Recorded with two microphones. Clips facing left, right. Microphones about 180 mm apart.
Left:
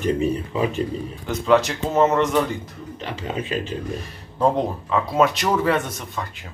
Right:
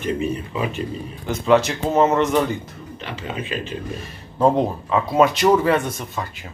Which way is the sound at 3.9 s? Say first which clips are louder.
Left 1 dB; 5° right (ahead or behind).